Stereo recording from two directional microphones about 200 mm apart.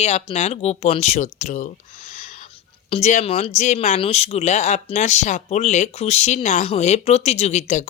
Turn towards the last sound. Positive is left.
turn(degrees=35)  # may be behind; listen again after turning